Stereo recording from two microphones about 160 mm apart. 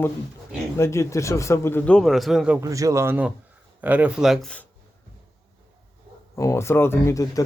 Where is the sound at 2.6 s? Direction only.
20° right (ahead or behind); by 4.6 s 5° left (ahead or behind).